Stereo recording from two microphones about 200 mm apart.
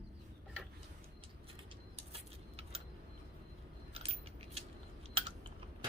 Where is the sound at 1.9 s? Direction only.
30° right (ahead or behind).